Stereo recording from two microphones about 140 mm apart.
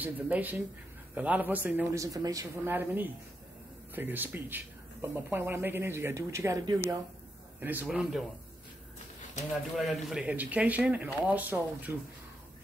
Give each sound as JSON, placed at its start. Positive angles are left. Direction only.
{"t": 0.0, "sound": "speech", "side_deg": -10}
{"t": 2.1, "sound": "speech", "side_deg": -25}
{"t": 2.7, "sound": "speech", "side_deg": -15}
{"t": 7.6, "sound": "a man's voice", "side_deg": -10}
{"t": 9.5, "sound": "speech", "side_deg": 0}